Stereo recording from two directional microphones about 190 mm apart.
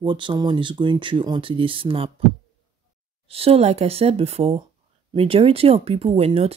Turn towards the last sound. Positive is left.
turn(degrees=-30)  # may be behind; listen again after turning